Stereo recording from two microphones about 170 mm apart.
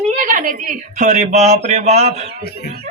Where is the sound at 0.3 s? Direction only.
50° right (ahead or behind).